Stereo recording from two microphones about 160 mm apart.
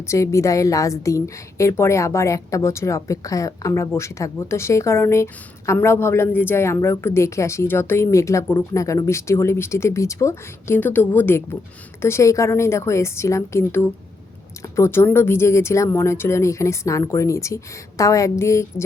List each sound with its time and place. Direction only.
0.0 s a woman's voice: 20° left (ahead or behind)